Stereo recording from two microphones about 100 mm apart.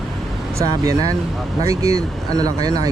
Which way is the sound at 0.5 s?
35° right (ahead or behind).